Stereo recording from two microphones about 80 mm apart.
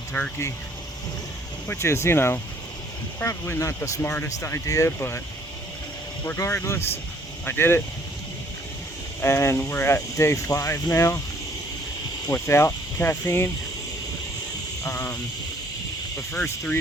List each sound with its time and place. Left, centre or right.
0.1 s speech: left
1.6 s speech: left
4.0 s speech: left
4.4 s speech: left
6.2 s speech: left
9.2 s speech: left
12.3 s speech: left
16.3 s speech: centre